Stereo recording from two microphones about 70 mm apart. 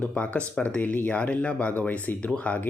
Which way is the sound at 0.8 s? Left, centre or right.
Left.